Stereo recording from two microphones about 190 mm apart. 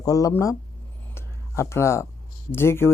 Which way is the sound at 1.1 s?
15° left (ahead or behind).